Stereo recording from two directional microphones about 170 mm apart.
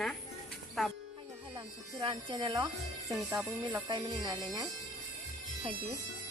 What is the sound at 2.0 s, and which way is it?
Speech, 30° right (ahead or behind).